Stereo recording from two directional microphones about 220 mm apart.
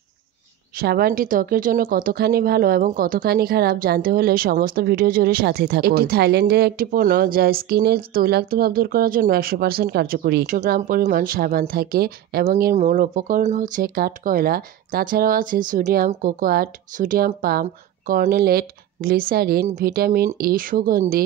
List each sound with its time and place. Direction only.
0.7 s a woman's voice: 45° right (ahead or behind)